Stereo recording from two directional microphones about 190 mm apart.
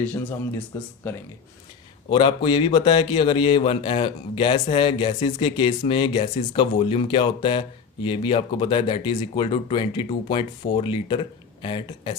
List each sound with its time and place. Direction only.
0.0 s speech: 5° left (ahead or behind)
2.0 s a man's voice: 25° left (ahead or behind)